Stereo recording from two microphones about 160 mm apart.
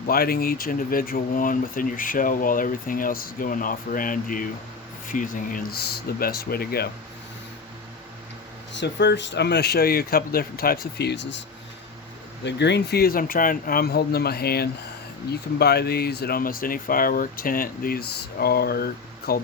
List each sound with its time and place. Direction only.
0.1 s speech: 70° left (ahead or behind)
8.7 s speech: 90° left
12.5 s speech: 90° left